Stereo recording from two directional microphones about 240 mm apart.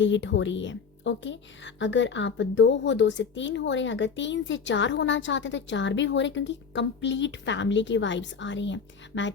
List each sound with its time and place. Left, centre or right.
0.0 s speech: left